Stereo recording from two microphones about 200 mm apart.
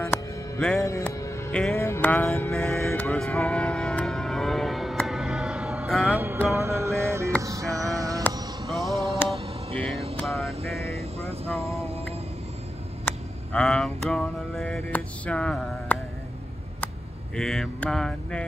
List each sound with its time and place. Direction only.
0.1 s music: 10° left (ahead or behind); by 7.3 s 15° right (ahead or behind)
7.4 s a sound: 15° right (ahead or behind)
8.6 s a sound: centre (ahead or behind)
10.1 s vehicle: centre (ahead or behind)
10.9 s vehicle: 30° right (ahead or behind)
13.0 s mantra: 5° left (ahead or behind)
17.4 s mantra: 5° left (ahead or behind)